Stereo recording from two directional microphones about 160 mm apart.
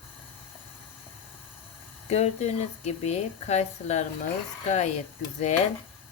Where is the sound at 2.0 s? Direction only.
40° left (ahead or behind).